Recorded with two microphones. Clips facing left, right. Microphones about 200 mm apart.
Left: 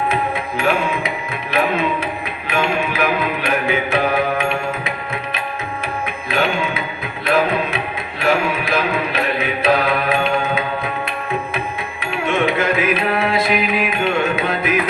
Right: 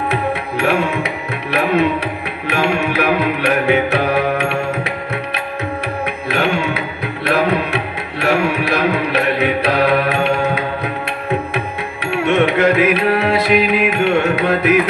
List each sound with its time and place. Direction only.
0.1 s music: 70° right (ahead or behind)
2.5 s music: 70° right (ahead or behind)
6.2 s music: 70° right (ahead or behind)
7.3 s tabla: 70° right (ahead or behind)
8.2 s music: 65° right (ahead or behind)
12.1 s music: 70° right (ahead or behind)